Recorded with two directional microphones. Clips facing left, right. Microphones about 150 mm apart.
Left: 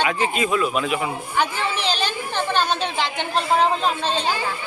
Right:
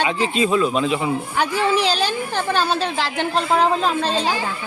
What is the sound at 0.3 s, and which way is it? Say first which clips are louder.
Speech: right 3 dB; 30° right (ahead or behind).